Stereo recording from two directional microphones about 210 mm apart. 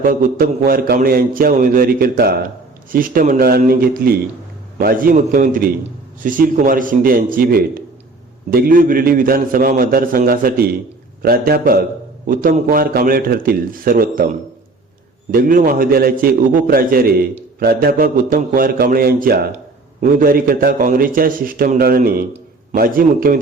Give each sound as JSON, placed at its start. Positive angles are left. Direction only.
{"t": 0.0, "sound": "a man's voice", "side_deg": -40}
{"t": 15.3, "sound": "a man's voice", "side_deg": -45}